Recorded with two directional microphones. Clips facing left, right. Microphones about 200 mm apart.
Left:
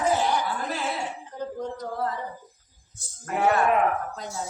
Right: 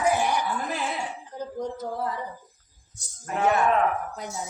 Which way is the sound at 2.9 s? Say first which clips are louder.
Left 1 dB; 5° left (ahead or behind).